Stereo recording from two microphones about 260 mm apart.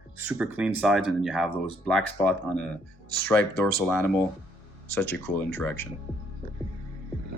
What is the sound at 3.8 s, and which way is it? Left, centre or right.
Speech, centre.